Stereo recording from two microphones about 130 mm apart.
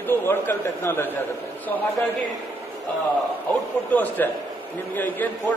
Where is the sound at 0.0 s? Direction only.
15° left (ahead or behind).